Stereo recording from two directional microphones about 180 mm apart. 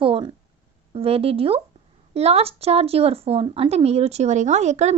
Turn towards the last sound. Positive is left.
turn(degrees=-40)  # may be behind; listen again after turning